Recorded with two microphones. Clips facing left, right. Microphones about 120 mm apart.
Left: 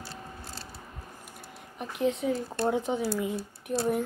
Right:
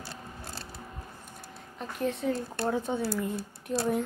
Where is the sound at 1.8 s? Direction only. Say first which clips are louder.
Left 3 dB; 15° left (ahead or behind).